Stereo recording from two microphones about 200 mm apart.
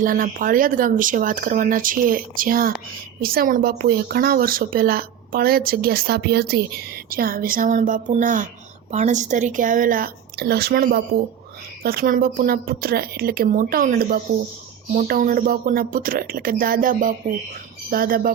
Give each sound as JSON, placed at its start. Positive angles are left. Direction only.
{"t": 0.0, "sound": "speech", "side_deg": -45}